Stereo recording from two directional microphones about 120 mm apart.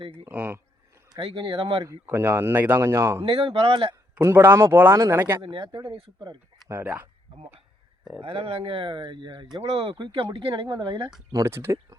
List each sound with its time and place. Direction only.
0.3 s speech: 15° right (ahead or behind)
1.1 s speech: 45° right (ahead or behind)
2.0 s speech: 20° right (ahead or behind)
3.2 s speech: 50° right (ahead or behind)
4.2 s speech: 20° right (ahead or behind)
5.4 s speech: 45° right (ahead or behind)
5.9 s speech: 50° right (ahead or behind)
6.7 s speech: 20° right (ahead or behind)
8.2 s speech: 45° right (ahead or behind)
11.3 s speech: 30° right (ahead or behind)